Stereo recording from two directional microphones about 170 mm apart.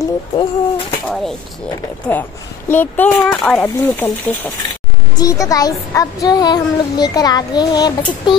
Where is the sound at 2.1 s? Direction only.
10° left (ahead or behind).